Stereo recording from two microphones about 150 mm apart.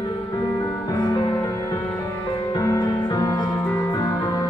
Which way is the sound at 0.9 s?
25° left (ahead or behind).